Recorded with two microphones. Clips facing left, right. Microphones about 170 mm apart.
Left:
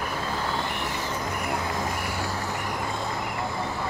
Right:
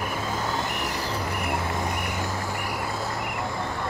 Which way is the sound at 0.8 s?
35° right (ahead or behind).